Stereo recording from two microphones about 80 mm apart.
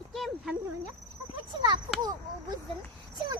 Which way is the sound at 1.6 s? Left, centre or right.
Right.